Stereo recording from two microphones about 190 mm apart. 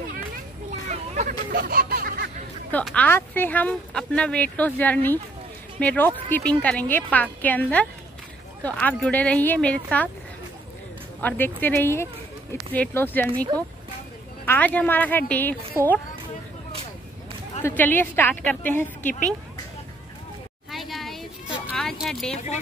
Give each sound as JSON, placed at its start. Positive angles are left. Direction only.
{"t": 0.8, "sound": "a sound", "side_deg": -35}
{"t": 1.5, "sound": "music", "side_deg": -50}
{"t": 2.7, "sound": "speech", "side_deg": 5}
{"t": 11.1, "sound": "speech", "side_deg": 10}
{"t": 14.4, "sound": "speech", "side_deg": 10}
{"t": 15.8, "sound": "speech", "side_deg": -15}
{"t": 17.6, "sound": "speech", "side_deg": 10}
{"t": 20.7, "sound": "a sound", "side_deg": 0}
{"t": 22.3, "sound": "speech", "side_deg": 35}